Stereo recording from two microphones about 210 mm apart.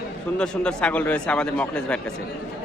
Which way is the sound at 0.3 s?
5° left (ahead or behind).